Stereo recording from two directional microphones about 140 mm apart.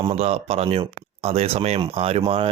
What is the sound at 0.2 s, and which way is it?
Speech, 45° right (ahead or behind).